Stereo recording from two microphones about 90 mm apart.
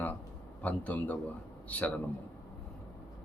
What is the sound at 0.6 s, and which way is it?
Speech, 15° left (ahead or behind).